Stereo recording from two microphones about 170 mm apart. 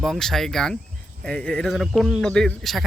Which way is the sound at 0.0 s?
Centre (ahead or behind).